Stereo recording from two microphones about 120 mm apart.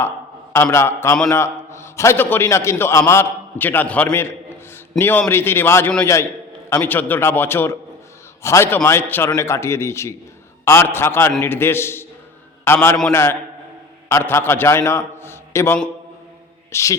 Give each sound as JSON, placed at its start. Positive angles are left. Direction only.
{"t": 0.5, "sound": "a man's voice", "side_deg": 20}